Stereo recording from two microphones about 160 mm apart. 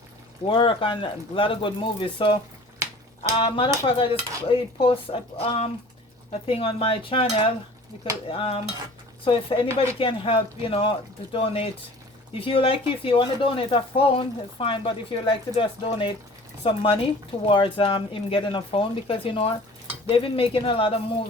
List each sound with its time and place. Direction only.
0.4 s speech: 30° left (ahead or behind)